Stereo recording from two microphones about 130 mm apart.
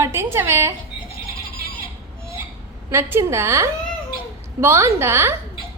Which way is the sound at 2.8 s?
25° right (ahead or behind).